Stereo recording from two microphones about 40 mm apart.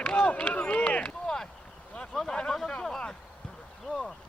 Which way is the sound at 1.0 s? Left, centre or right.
Centre.